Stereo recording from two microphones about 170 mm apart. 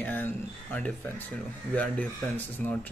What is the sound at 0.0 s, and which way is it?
Speech, 10° left (ahead or behind).